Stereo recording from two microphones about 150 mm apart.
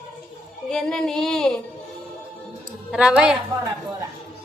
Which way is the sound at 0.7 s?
5° left (ahead or behind).